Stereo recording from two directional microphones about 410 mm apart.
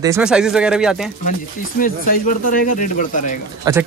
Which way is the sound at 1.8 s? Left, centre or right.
Centre.